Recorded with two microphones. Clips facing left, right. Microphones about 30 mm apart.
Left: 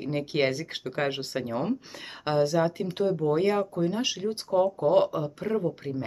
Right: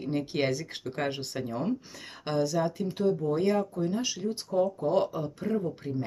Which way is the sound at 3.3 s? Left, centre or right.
Left.